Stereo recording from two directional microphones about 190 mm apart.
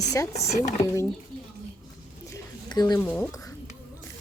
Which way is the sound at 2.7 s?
20° left (ahead or behind).